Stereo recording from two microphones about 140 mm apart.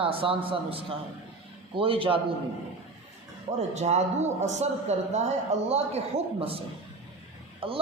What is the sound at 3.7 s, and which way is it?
A man's voice, 55° right (ahead or behind).